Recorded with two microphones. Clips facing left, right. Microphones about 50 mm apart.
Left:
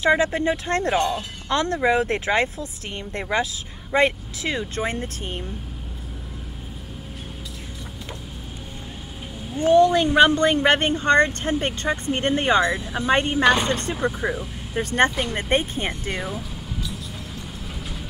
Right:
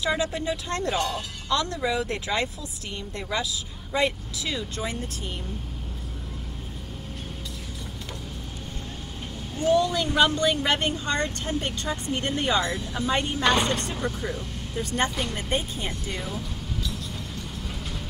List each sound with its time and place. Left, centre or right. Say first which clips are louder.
0.0 s speech: left 7 dB; left
9.6 s speech: left 6 dB; left
12.7 s speech: left 3 dB; left
13.4 s speech: left 4 dB; centre
14.8 s speech: left 7 dB; left
15.0 s speech: left 4 dB; centre
15.3 s speech: left 6 dB; left